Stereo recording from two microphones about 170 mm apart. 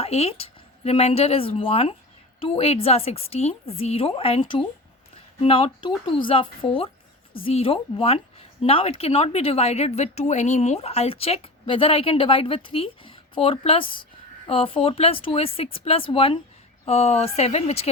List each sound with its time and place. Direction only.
0.0 s a woman's voice: 35° left (ahead or behind)